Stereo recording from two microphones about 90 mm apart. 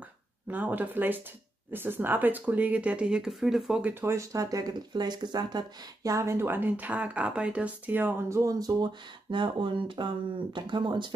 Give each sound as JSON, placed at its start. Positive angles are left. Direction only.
{"t": 0.5, "sound": "speech", "side_deg": -20}
{"t": 3.9, "sound": "speech", "side_deg": -30}
{"t": 8.3, "sound": "speech", "side_deg": -35}
{"t": 9.3, "sound": "speech", "side_deg": -65}